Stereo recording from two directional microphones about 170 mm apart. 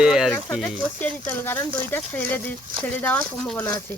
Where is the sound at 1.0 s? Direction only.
10° left (ahead or behind).